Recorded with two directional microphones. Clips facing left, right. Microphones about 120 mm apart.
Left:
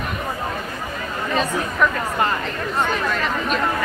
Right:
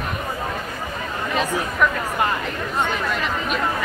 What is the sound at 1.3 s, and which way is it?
Speech, 15° right (ahead or behind).